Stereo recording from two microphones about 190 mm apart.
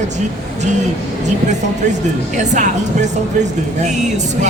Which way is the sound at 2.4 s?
40° right (ahead or behind).